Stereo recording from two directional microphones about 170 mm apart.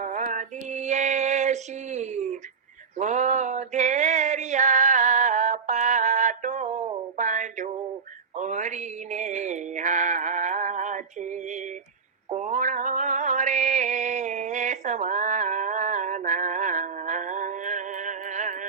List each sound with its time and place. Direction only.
0.0 s female singing: 50° right (ahead or behind)
3.0 s a sound: 45° right (ahead or behind)
8.4 s mantra: 45° right (ahead or behind)